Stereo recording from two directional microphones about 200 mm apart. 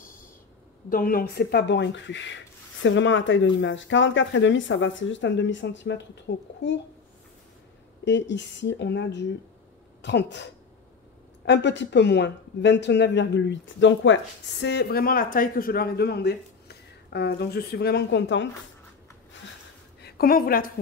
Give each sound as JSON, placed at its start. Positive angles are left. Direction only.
{"t": 0.8, "sound": "speech", "side_deg": 45}
{"t": 8.0, "sound": "speech", "side_deg": 65}
{"t": 20.0, "sound": "a woman's voice", "side_deg": 50}